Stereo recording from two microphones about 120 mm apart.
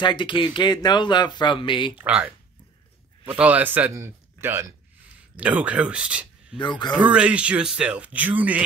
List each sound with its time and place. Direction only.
0.0 s speech: 40° left (ahead or behind)
2.0 s a man's voice: 10° right (ahead or behind)
3.3 s a man's voice: 15° right (ahead or behind)
6.6 s speech: 40° left (ahead or behind)
7.0 s a man's voice: 10° right (ahead or behind)